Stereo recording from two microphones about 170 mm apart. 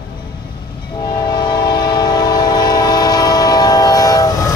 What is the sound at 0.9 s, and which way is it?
Train, 25° left (ahead or behind).